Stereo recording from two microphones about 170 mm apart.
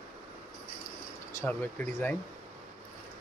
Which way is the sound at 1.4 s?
10° left (ahead or behind).